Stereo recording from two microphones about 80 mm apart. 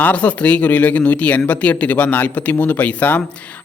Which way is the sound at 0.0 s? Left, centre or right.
Centre.